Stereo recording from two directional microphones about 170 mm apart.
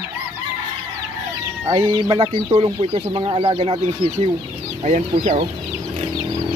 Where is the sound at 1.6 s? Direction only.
20° right (ahead or behind); by 5.4 s 45° right (ahead or behind).